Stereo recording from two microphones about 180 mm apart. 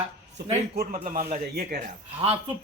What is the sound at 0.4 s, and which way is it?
Speech, 65° right (ahead or behind).